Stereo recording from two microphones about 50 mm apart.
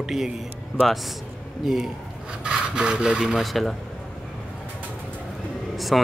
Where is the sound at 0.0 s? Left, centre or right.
Centre.